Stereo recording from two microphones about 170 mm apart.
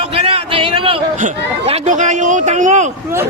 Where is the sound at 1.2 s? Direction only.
40° right (ahead or behind).